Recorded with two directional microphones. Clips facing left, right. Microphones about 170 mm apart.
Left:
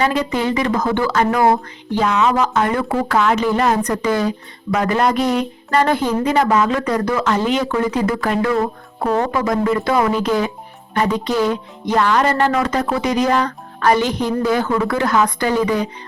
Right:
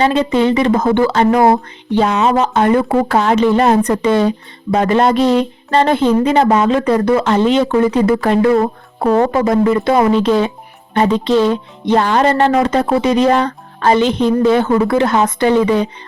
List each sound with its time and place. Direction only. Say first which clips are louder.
0.0 s speech: right 5 dB; 25° right (ahead or behind)